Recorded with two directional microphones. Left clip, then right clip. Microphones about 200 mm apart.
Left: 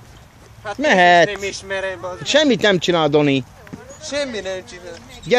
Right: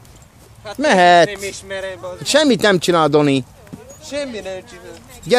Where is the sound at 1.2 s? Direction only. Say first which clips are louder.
Left 1 dB; 5° right (ahead or behind).